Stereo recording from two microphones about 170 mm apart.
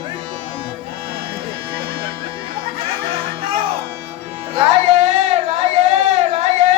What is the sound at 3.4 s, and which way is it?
Music, 30° right (ahead or behind).